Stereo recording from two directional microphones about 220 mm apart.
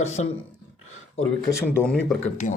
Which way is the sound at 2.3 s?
35° left (ahead or behind).